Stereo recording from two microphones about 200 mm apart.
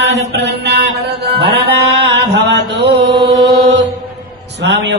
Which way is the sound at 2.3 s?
60° right (ahead or behind).